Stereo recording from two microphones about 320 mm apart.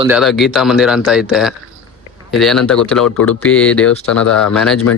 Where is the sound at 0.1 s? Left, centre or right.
Centre.